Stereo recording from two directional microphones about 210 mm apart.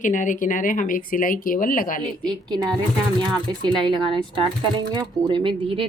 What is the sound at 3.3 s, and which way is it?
Speech, 20° right (ahead or behind).